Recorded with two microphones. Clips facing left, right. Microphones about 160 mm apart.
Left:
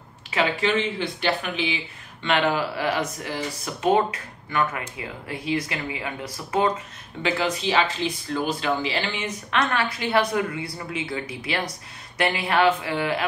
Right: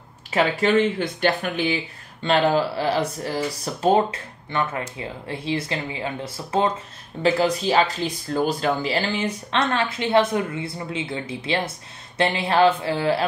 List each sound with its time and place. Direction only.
0.3 s speech: 45° right (ahead or behind)
2.2 s speech: 30° right (ahead or behind)
7.2 s speech: 40° right (ahead or behind)